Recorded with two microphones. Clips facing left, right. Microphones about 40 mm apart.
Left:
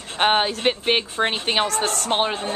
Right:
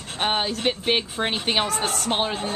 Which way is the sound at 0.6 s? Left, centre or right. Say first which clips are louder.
Left 2 dB; centre.